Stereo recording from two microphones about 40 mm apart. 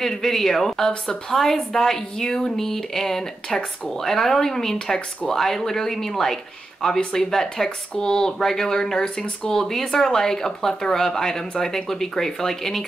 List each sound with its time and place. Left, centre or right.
0.0 s a woman's voice: centre
9.0 s speech: left
9.5 s a woman's voice: centre